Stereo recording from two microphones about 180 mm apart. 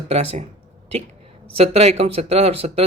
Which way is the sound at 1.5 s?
35° right (ahead or behind).